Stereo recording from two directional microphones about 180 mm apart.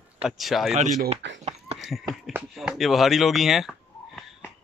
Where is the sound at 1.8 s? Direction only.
Centre (ahead or behind).